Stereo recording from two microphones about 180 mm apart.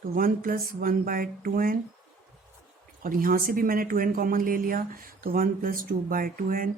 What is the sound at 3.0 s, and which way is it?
Speech, 55° right (ahead or behind).